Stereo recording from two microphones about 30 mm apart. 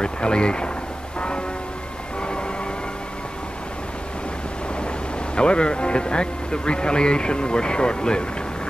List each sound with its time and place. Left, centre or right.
0.0 s speech: left
2.2 s train: left
5.3 s speech: left